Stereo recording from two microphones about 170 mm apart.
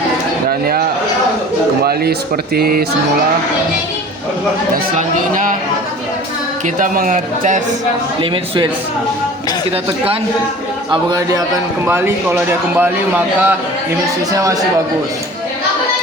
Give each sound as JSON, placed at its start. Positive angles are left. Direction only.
{"t": 1.8, "sound": "speech", "side_deg": -65}
{"t": 4.7, "sound": "speech", "side_deg": -50}
{"t": 6.7, "sound": "speech", "side_deg": -50}
{"t": 8.2, "sound": "a man's voice", "side_deg": -25}
{"t": 10.9, "sound": "a man's voice", "side_deg": -20}